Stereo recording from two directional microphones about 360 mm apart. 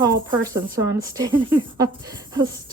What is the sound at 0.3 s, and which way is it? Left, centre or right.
Speech, centre.